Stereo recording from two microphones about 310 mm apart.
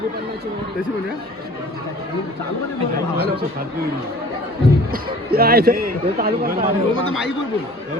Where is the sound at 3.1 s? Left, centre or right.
Right.